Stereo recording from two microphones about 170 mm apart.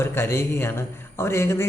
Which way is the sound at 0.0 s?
15° left (ahead or behind).